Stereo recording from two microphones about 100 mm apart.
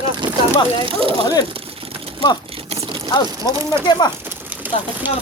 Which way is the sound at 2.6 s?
80° right.